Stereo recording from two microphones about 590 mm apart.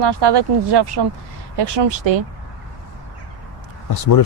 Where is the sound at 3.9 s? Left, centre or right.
Left.